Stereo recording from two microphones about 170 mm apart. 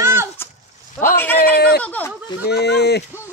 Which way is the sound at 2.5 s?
80° left.